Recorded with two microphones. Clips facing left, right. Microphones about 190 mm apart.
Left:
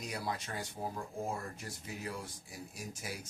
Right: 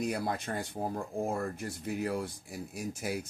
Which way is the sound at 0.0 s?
55° right (ahead or behind).